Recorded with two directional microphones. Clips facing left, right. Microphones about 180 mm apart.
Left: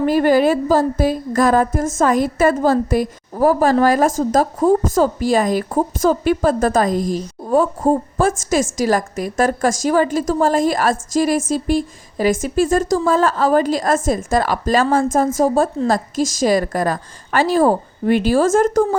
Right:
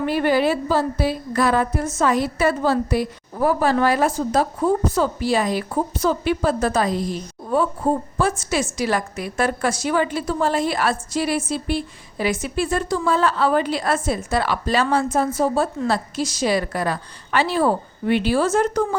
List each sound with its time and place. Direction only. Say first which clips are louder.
0.0 s a woman's voice: left 5 dB; 40° left (ahead or behind)